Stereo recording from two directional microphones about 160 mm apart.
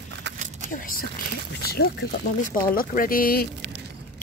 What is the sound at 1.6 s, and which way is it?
Speech, 80° left.